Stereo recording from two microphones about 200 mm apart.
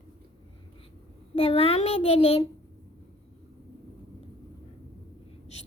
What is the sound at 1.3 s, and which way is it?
A child's voice, 30° left (ahead or behind).